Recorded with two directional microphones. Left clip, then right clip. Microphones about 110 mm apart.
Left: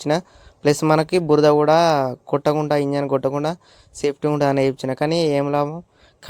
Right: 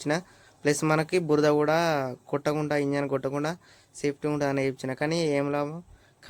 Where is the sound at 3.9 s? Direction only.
60° left (ahead or behind).